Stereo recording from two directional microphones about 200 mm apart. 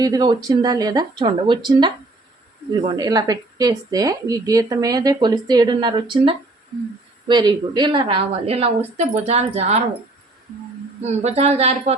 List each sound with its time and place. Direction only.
0.0 s a woman's voice: 20° right (ahead or behind)
11.2 s speech: 35° right (ahead or behind)